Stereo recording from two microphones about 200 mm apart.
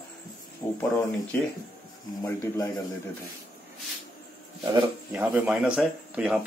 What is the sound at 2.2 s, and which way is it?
Speech, 15° left (ahead or behind).